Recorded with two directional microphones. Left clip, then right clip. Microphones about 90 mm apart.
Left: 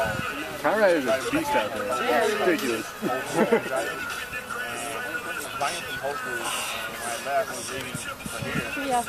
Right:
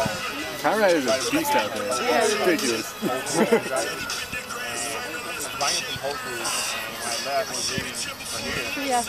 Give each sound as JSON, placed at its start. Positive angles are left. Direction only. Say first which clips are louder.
{"t": 0.7, "sound": "speech", "louder": "right 1 dB", "side_deg": -30}
{"t": 5.6, "sound": "a sound", "louder": "right 4 dB", "side_deg": -30}
{"t": 8.5, "sound": "speech", "louder": "right 1 dB", "side_deg": -30}